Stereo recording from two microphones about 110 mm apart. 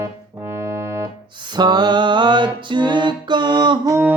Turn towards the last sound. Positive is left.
turn(degrees=-40)  # may be behind; listen again after turning